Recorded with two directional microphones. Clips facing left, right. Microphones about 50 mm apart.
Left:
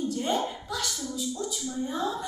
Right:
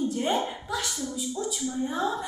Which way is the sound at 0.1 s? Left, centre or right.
Right.